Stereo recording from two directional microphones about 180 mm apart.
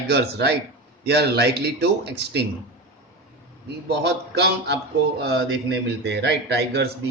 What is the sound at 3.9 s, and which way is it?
Speech, 65° right (ahead or behind).